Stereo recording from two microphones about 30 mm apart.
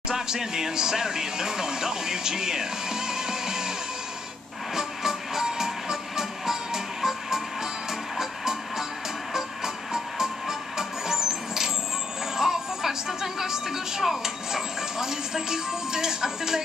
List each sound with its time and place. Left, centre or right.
0.1 s speech: centre
4.7 s music: centre
9.9 s music: centre